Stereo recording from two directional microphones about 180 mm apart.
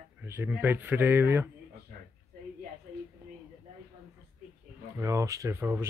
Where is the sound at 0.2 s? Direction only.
10° right (ahead or behind).